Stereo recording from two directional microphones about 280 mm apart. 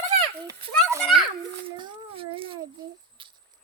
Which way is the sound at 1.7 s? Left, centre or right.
Centre.